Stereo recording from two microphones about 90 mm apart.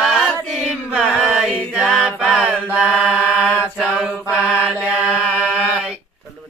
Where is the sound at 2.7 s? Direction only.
10° right (ahead or behind).